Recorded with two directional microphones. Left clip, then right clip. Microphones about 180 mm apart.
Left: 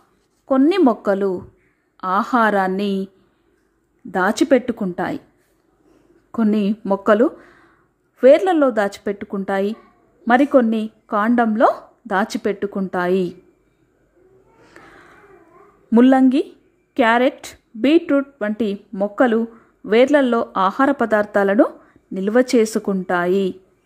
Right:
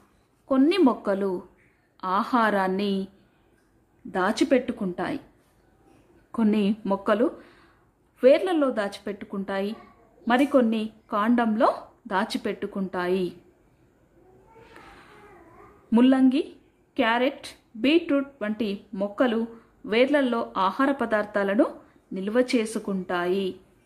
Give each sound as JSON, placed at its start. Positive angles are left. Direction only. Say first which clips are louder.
{"t": 0.5, "sound": "a woman's voice", "louder": "left 6 dB", "side_deg": 25}
{"t": 4.1, "sound": "a woman's voice", "louder": "left 7 dB", "side_deg": 20}
{"t": 6.3, "sound": "a woman's voice", "louder": "left 5 dB", "side_deg": 20}
{"t": 14.7, "sound": "a sound", "louder": "left 5 dB", "side_deg": 20}
{"t": 15.9, "sound": "a woman's voice", "louder": "left 7 dB", "side_deg": 25}